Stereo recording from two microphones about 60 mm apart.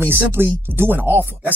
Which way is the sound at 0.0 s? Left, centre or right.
Right.